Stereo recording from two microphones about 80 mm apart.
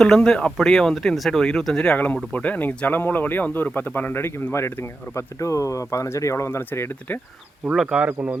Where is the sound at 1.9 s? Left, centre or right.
Left.